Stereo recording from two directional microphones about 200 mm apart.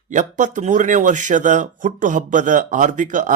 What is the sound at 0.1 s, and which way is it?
A man's voice, 40° right (ahead or behind).